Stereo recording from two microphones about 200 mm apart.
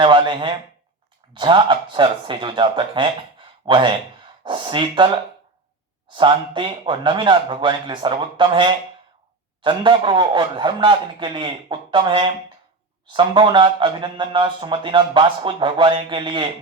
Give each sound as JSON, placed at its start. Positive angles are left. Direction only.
{"t": 0.0, "sound": "a man's voice", "side_deg": -25}
{"t": 6.1, "sound": "a man's voice", "side_deg": -25}